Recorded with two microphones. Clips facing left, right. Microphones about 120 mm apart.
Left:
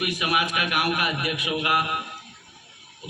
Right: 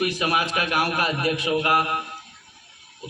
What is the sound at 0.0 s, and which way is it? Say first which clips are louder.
A man's voice: right 2 dB; 30° right (ahead or behind).